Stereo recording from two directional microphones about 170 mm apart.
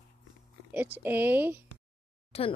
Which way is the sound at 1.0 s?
10° right (ahead or behind).